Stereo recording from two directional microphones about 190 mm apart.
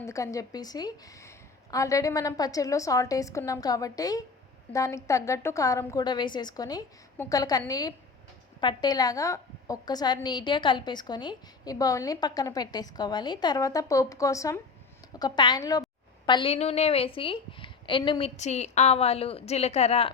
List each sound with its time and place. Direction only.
0.0 s a woman's voice: 15° left (ahead or behind)
18.3 s a woman's voice: 35° left (ahead or behind)